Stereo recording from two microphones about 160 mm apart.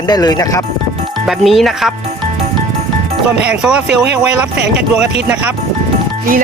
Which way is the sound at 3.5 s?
5° right (ahead or behind).